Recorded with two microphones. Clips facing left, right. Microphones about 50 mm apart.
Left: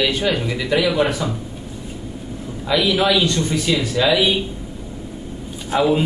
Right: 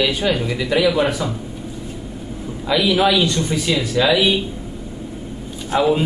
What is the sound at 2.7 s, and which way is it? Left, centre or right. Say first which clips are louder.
Speech: right 1 dB; centre.